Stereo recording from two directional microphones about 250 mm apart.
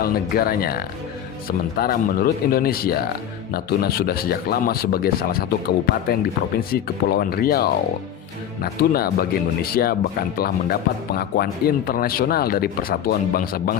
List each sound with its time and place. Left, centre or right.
0.0 s speech: left